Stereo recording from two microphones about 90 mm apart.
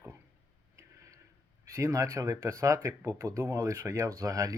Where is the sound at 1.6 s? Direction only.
35° right (ahead or behind).